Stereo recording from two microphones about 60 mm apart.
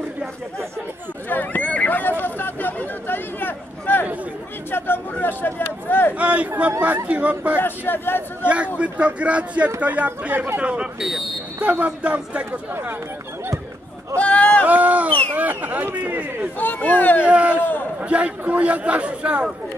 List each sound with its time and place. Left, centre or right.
1.3 s speech: left
1.7 s a sound: left
4.6 s speech: left
6.1 s a man's voice: right
7.5 s speech: left
8.7 s a man's voice: right
11.0 s speech: centre
11.6 s a man's voice: right
14.1 s a sound: left
14.7 s a sound: right
15.3 s a man's voice: right
16.5 s speech: left
17.2 s a man's voice: right